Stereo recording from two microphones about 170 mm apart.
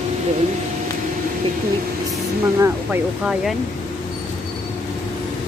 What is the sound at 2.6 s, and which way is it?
Speech, 10° right (ahead or behind).